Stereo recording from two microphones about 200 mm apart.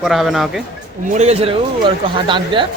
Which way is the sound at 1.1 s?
35° right (ahead or behind).